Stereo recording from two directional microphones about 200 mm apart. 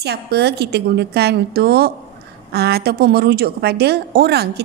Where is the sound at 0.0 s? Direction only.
55° right (ahead or behind).